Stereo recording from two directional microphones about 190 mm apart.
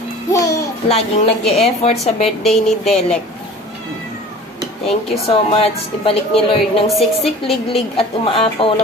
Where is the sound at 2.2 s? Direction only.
Centre (ahead or behind).